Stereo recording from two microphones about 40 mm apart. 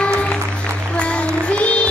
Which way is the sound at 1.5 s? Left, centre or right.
Left.